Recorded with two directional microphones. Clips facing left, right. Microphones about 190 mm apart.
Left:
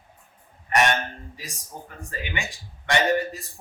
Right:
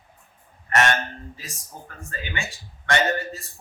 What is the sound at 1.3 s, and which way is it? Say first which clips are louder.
A man's voice: left 2 dB; 15° left (ahead or behind).